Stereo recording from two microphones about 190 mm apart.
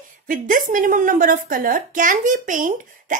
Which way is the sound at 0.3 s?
45° right (ahead or behind).